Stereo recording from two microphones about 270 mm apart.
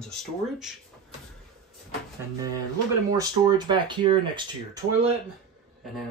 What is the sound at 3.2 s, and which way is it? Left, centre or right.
Speech, centre.